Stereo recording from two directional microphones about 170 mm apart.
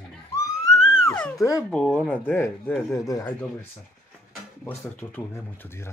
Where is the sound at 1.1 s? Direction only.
10° left (ahead or behind).